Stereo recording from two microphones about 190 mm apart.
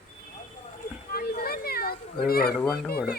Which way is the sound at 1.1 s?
55° left (ahead or behind).